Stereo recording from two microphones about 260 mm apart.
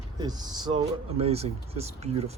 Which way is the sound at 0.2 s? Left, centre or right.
Centre.